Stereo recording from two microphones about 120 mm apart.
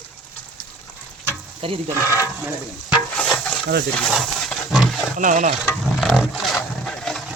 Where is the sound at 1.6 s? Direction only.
50° right (ahead or behind).